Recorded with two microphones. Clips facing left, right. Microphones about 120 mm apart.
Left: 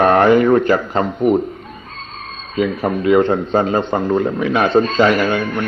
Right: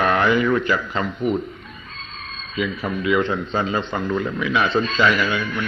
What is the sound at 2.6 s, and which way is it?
A man's voice, 50° left (ahead or behind).